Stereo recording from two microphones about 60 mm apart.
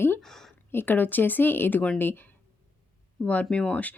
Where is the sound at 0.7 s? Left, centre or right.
Left.